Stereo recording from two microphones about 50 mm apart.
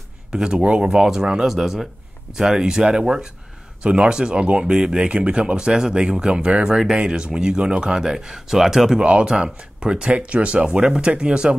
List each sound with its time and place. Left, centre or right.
0.3 s speech: centre
9.0 s speech: right